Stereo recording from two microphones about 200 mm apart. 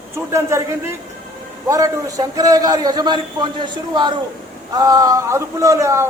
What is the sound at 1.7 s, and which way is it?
A man's voice, 15° right (ahead or behind).